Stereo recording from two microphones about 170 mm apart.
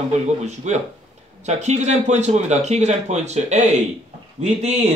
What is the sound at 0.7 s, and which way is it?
A man's voice, 40° right (ahead or behind).